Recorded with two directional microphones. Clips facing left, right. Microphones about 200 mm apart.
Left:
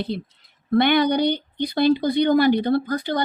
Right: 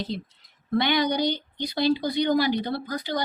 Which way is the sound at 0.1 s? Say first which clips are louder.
Left 3 dB; 60° left (ahead or behind).